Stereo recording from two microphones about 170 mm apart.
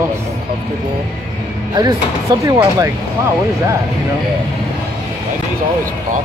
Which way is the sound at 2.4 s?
20° right (ahead or behind).